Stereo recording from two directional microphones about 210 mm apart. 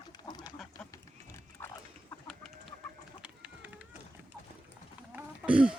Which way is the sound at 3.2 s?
5° right (ahead or behind).